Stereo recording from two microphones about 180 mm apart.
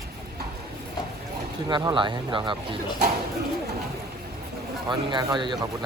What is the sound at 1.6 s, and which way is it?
Speech, 25° right (ahead or behind).